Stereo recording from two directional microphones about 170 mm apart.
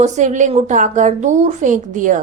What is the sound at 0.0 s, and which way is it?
A woman's voice, 45° right (ahead or behind).